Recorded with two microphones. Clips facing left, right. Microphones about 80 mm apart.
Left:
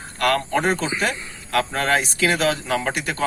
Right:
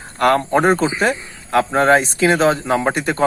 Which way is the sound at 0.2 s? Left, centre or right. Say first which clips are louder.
Right 6 dB; right.